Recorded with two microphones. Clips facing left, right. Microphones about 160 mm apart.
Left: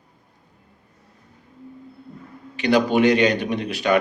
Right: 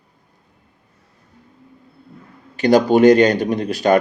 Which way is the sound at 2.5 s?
40° right (ahead or behind).